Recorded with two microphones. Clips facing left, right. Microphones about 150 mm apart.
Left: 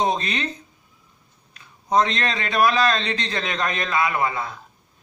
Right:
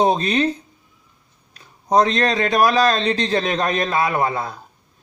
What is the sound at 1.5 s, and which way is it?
A man's voice, 35° right (ahead or behind).